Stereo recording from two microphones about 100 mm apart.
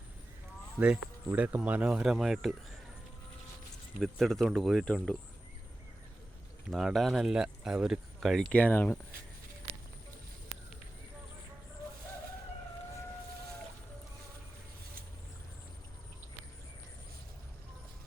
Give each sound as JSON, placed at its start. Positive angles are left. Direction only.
{"t": 0.8, "sound": "speech", "side_deg": -15}
{"t": 4.0, "sound": "speech", "side_deg": 0}
{"t": 6.7, "sound": "speech", "side_deg": 0}
{"t": 8.5, "sound": "speech", "side_deg": 15}